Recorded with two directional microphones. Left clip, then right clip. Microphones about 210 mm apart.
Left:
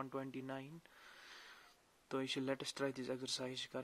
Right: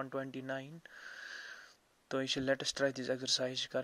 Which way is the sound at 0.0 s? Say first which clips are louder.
Right 5 dB; 20° right (ahead or behind).